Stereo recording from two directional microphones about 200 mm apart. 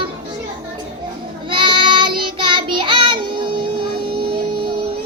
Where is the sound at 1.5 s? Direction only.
25° right (ahead or behind).